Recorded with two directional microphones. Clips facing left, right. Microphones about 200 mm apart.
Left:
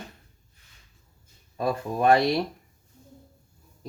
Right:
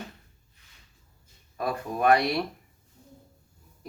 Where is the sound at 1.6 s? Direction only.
25° left (ahead or behind).